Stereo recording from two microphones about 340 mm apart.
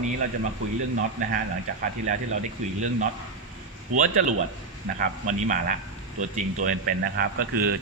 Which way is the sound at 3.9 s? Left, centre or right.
Right.